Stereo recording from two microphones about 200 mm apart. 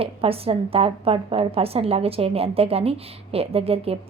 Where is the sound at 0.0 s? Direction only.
30° right (ahead or behind).